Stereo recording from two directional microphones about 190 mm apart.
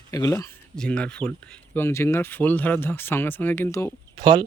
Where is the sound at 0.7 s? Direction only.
5° left (ahead or behind).